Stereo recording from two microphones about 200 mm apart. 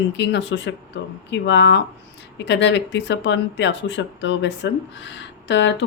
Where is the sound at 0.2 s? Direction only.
60° left (ahead or behind).